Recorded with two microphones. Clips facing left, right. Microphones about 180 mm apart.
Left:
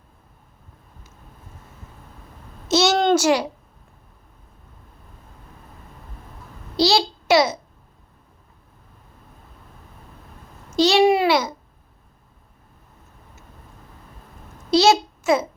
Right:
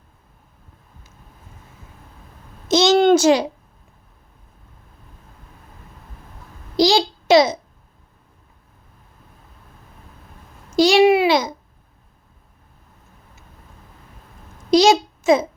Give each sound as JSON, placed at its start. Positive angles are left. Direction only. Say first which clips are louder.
{"t": 2.6, "sound": "child singing", "louder": "right 4 dB", "side_deg": -15}
{"t": 3.2, "sound": "a child's voice", "louder": "right 4 dB", "side_deg": -20}
{"t": 6.7, "sound": "a sound", "louder": "right 3 dB", "side_deg": -15}
{"t": 10.8, "sound": "babbling", "louder": "right 3 dB", "side_deg": -10}
{"t": 11.3, "sound": "babbling", "louder": "right 2 dB", "side_deg": -15}
{"t": 14.7, "sound": "a sound", "louder": "right 2 dB", "side_deg": -15}